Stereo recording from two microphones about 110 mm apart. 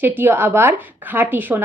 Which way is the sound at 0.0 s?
20° right (ahead or behind).